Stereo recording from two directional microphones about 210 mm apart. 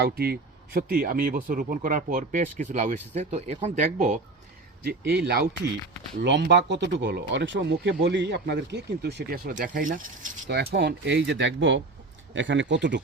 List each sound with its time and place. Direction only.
0.0 s speech: 45° right (ahead or behind)
4.9 s speech: 50° right (ahead or behind)